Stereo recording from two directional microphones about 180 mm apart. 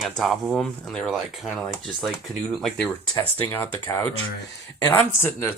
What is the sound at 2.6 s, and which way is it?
Speech, 5° left (ahead or behind).